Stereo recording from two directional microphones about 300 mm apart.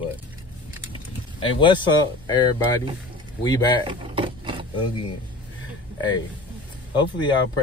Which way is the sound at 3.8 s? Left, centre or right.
Centre.